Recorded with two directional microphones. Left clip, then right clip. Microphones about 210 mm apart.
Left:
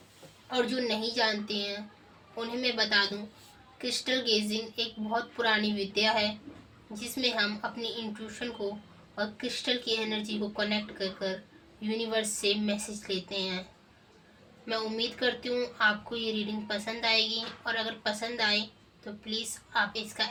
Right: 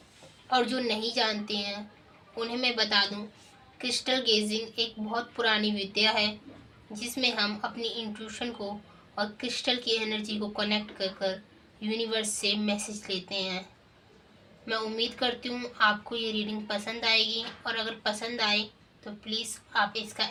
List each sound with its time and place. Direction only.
0.5 s speech: 40° right (ahead or behind)
14.7 s speech: 40° right (ahead or behind)